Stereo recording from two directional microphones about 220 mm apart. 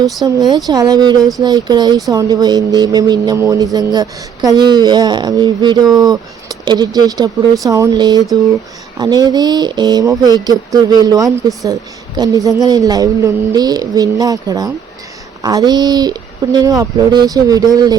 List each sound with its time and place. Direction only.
0.3 s speech: 15° right (ahead or behind)